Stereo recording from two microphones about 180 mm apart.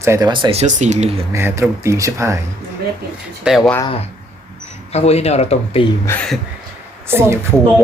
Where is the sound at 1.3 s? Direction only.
15° right (ahead or behind).